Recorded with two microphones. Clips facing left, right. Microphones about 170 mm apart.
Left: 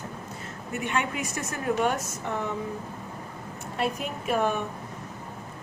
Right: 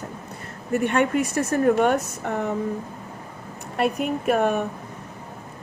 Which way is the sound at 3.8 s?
60° right (ahead or behind).